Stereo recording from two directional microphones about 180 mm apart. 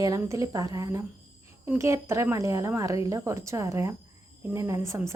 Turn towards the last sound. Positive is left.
turn(degrees=-15)  # may be behind; listen again after turning